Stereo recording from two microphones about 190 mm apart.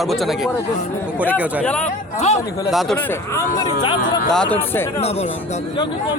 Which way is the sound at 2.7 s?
Centre (ahead or behind).